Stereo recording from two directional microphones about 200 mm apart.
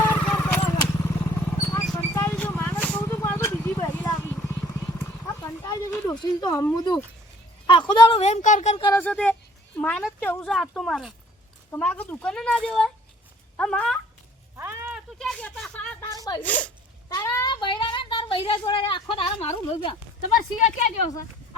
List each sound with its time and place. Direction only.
0.0 s vehicle: 10° left (ahead or behind)
7.7 s a woman's voice: 25° left (ahead or behind)
8.8 s speech: 15° left (ahead or behind)
14.5 s a sound: 15° right (ahead or behind)
14.9 s a sound: 5° left (ahead or behind)
16.4 s speech: 5° left (ahead or behind); by 20.0 s 30° left (ahead or behind)
20.6 s a woman's voice: 40° left (ahead or behind)